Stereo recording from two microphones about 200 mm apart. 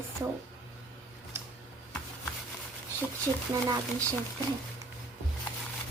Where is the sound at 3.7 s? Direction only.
15° right (ahead or behind).